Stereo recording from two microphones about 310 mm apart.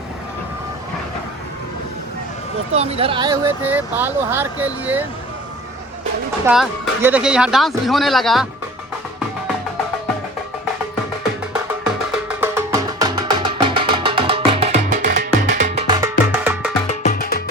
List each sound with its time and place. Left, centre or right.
2.7 s speech: centre
6.4 s speech: centre
12.4 s music: centre
17.0 s music: left